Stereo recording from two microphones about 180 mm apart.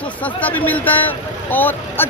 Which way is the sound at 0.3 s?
10° left (ahead or behind).